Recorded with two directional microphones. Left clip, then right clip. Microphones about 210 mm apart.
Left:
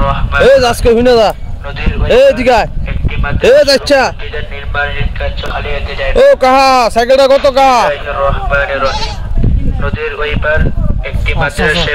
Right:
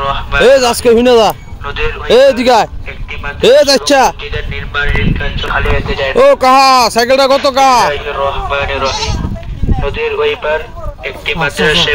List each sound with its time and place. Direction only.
0.0 s vehicle: 50° right (ahead or behind)
0.5 s speech: 5° right (ahead or behind)
5.5 s speech: 45° right (ahead or behind)
6.1 s speech: 5° right (ahead or behind)
7.9 s speech: 45° right (ahead or behind)
9.8 s speech: 50° right (ahead or behind)